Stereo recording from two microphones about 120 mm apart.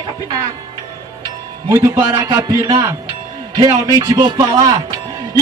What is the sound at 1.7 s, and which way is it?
Music, 20° right (ahead or behind).